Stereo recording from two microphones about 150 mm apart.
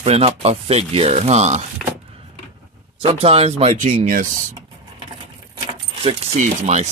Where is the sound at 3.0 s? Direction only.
40° right (ahead or behind); by 4.6 s 55° right (ahead or behind).